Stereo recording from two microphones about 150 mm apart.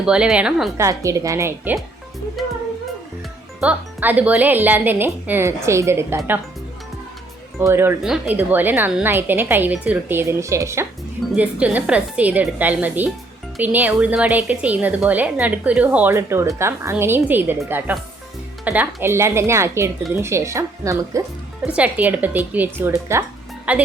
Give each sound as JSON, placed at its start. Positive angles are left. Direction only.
{"t": 0.0, "sound": "a woman's voice", "side_deg": -5}
{"t": 0.8, "sound": "speech", "side_deg": -20}
{"t": 2.4, "sound": "speech", "side_deg": 0}
{"t": 3.6, "sound": "a woman's voice", "side_deg": -10}
{"t": 7.6, "sound": "a woman's voice", "side_deg": -15}
{"t": 21.8, "sound": "a woman's voice", "side_deg": -10}